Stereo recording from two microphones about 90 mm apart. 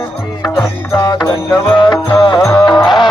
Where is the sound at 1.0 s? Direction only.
55° left (ahead or behind).